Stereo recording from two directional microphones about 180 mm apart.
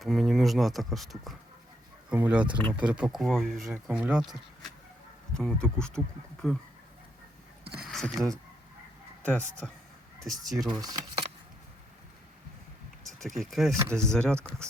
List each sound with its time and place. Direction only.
0.0 s speech: centre (ahead or behind)
2.6 s speech: 25° right (ahead or behind)
2.8 s speech: 5° right (ahead or behind)
7.8 s speech: centre (ahead or behind)
10.7 s speech: 20° right (ahead or behind)
13.1 s speech: centre (ahead or behind)
13.7 s speech: 15° right (ahead or behind)
13.9 s speech: 5° left (ahead or behind)